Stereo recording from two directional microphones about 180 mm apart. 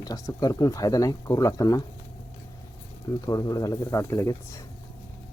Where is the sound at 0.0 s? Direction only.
20° left (ahead or behind).